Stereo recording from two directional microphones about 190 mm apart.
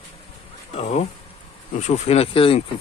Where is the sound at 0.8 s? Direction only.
35° left (ahead or behind).